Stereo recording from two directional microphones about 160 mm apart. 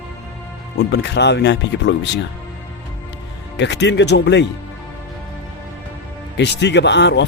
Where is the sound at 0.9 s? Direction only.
90° left.